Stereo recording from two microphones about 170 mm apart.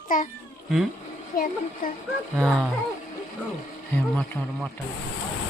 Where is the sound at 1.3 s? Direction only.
60° left (ahead or behind).